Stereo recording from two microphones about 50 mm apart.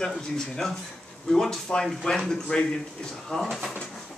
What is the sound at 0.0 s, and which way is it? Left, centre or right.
Speech, centre.